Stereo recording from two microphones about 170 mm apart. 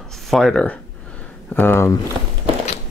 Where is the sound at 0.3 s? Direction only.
Centre (ahead or behind).